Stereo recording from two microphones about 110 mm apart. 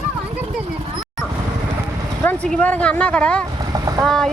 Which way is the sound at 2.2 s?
10° left (ahead or behind).